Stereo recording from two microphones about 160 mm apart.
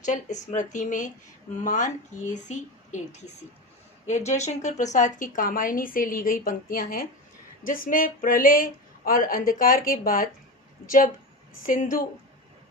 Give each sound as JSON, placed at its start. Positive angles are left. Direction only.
{"t": 0.0, "sound": "a woman's voice", "side_deg": 50}